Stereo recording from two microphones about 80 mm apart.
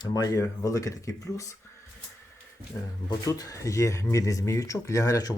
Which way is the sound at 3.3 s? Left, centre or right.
Left.